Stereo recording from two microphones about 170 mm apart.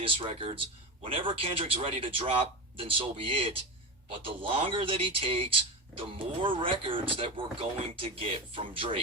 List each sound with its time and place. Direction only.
0.0 s speech: 30° right (ahead or behind)